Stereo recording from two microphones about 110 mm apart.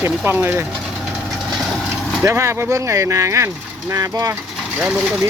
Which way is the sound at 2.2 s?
25° right (ahead or behind).